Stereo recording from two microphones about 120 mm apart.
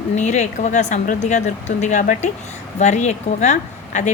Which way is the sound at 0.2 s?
75° left (ahead or behind).